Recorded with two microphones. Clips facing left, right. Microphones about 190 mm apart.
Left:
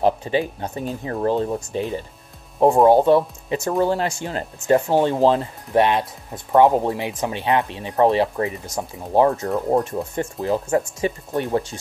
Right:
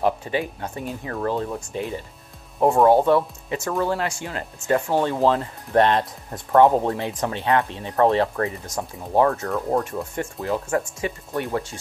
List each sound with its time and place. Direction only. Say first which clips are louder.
0.0 s speech: left 3 dB; 25° left (ahead or behind)
3.6 s speech: left 4 dB; 30° left (ahead or behind)
5.7 s speech: even; 5° left (ahead or behind)
9.2 s speech: left 2 dB; 20° left (ahead or behind)